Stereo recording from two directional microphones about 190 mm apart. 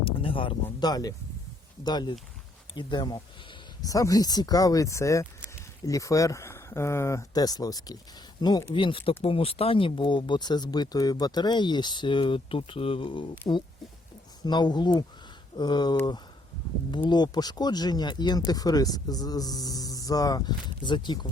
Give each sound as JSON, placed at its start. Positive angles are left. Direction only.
{"t": 0.0, "sound": "speech", "side_deg": 30}